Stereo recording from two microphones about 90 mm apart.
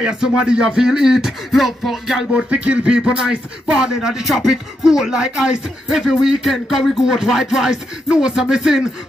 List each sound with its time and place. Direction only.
0.4 s music: 10° right (ahead or behind)